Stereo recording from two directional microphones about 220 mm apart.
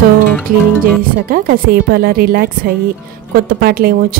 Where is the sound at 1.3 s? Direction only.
40° right (ahead or behind).